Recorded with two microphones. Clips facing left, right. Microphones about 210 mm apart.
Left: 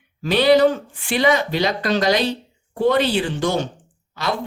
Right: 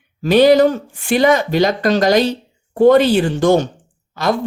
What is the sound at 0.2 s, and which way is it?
Speech, 45° right (ahead or behind).